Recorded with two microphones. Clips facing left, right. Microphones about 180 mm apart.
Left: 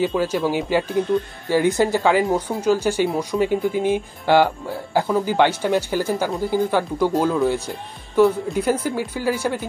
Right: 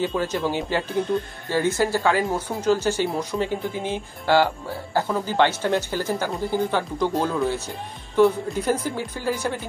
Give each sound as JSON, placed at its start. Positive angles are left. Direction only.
{"t": 0.0, "sound": "speech", "side_deg": 10}